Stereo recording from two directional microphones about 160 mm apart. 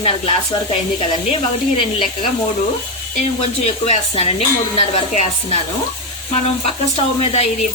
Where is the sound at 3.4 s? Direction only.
40° left (ahead or behind).